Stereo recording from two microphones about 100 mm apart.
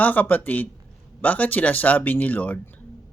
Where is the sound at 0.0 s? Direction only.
15° left (ahead or behind).